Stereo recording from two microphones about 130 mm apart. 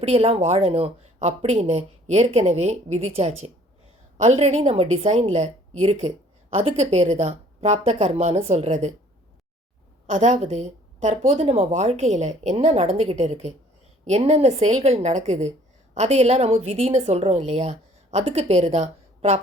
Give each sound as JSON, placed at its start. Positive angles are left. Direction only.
{"t": 0.0, "sound": "a woman's voice", "side_deg": -55}
{"t": 10.1, "sound": "a woman's voice", "side_deg": -65}